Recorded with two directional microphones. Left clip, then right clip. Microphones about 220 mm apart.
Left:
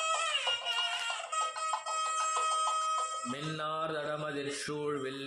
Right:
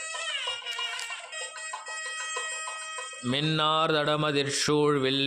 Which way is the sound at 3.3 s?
40° right (ahead or behind).